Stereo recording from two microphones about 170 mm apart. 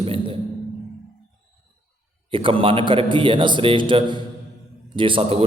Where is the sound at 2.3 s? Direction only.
30° right (ahead or behind).